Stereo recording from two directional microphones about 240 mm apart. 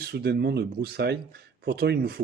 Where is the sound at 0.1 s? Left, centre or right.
Right.